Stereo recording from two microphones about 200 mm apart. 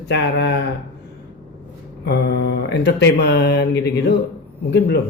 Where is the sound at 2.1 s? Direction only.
55° left (ahead or behind).